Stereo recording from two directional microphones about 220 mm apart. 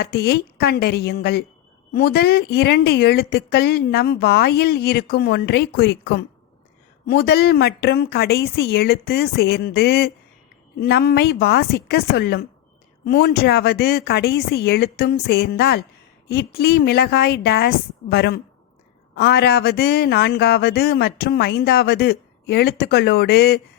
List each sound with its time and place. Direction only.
0.0 s speech: 45° left (ahead or behind)